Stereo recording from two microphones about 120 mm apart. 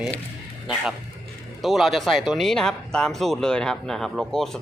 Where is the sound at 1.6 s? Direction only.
Centre (ahead or behind).